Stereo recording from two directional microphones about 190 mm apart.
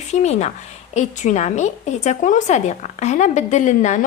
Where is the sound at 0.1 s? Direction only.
35° left (ahead or behind).